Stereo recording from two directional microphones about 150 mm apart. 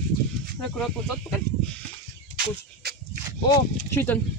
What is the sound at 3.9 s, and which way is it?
Speech, 15° left (ahead or behind).